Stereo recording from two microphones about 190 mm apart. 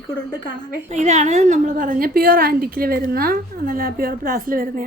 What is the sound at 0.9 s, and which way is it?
A woman's voice, 35° right (ahead or behind).